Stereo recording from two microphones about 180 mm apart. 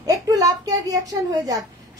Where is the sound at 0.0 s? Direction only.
20° right (ahead or behind).